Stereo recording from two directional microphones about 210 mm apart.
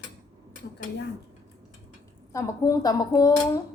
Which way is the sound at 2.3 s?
15° left (ahead or behind).